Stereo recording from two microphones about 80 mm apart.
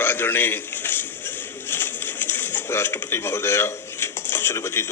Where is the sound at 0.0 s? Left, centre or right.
Left.